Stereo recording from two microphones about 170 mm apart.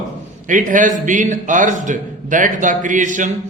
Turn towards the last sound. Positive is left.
turn(degrees=-50)  # may be behind; listen again after turning